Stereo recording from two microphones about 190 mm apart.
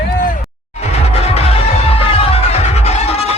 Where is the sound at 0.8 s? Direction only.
35° left (ahead or behind).